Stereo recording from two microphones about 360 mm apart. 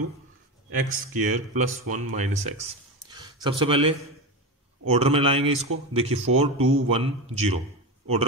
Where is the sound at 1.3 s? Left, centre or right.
Centre.